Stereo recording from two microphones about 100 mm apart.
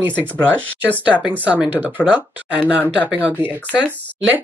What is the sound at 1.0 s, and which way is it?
Speech, 15° right (ahead or behind).